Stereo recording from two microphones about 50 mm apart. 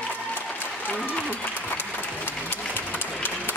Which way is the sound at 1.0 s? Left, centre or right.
Left.